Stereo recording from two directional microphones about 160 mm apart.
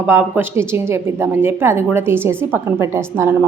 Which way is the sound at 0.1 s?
15° right (ahead or behind).